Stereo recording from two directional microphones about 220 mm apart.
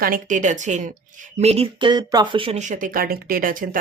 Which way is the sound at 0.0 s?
35° right (ahead or behind).